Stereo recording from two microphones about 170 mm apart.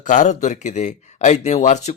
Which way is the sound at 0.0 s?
50° left (ahead or behind).